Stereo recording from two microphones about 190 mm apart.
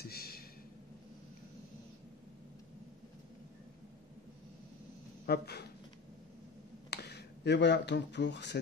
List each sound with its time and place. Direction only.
0.0 s a sound: 55° left (ahead or behind)
5.2 s speech: 60° left (ahead or behind)
6.9 s speech: 60° left (ahead or behind)